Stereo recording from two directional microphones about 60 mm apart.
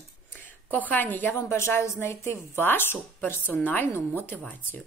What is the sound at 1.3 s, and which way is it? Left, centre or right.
Speech, left.